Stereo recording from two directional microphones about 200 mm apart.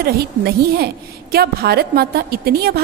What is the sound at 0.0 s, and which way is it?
A woman's voice, 50° right (ahead or behind).